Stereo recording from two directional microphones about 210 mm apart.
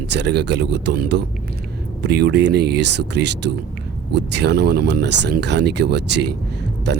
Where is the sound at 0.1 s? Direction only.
55° right (ahead or behind).